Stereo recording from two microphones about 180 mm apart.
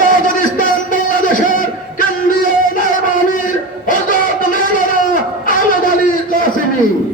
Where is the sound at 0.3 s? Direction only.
45° left (ahead or behind).